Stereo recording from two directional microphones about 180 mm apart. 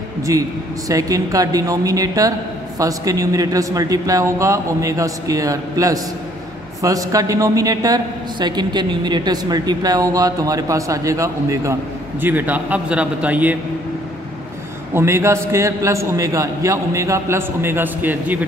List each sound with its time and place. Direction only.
0.3 s a man's voice: 20° right (ahead or behind)
15.0 s a man's voice: 15° right (ahead or behind)